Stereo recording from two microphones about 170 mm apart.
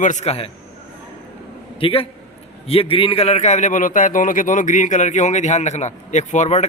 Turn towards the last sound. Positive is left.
turn(degrees=45)  # may be behind; listen again after turning